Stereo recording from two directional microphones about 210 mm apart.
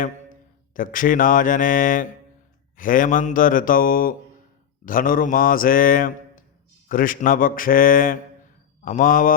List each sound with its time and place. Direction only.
0.7 s speech: 40° left (ahead or behind)